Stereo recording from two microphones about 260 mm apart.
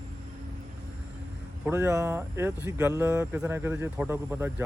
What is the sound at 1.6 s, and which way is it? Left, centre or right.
Speech, centre.